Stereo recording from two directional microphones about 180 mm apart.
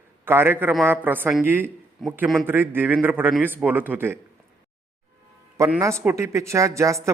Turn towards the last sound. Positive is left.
turn(degrees=-15)  # may be behind; listen again after turning